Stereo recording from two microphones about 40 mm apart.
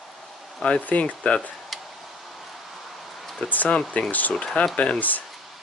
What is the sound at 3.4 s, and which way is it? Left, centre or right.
Speech, left.